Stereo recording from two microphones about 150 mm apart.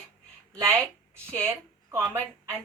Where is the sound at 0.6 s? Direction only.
15° right (ahead or behind).